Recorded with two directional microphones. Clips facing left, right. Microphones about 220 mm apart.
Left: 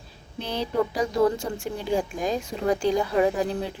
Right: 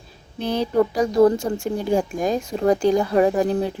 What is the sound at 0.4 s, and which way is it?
Speech, 45° right (ahead or behind).